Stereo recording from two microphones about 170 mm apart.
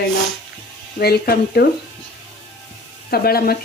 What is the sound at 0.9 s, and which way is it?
Speech, 65° left (ahead or behind).